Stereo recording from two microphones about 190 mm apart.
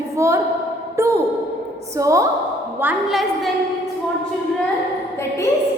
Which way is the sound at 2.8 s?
Centre (ahead or behind).